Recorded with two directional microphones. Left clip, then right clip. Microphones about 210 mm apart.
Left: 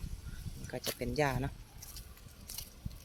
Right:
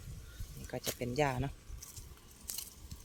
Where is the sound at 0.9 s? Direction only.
10° right (ahead or behind).